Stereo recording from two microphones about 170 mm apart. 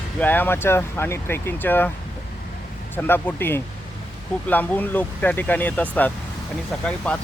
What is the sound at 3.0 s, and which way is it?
Speech, 10° left (ahead or behind).